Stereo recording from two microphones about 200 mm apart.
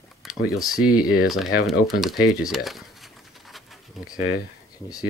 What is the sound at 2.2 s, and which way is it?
Bird, centre (ahead or behind).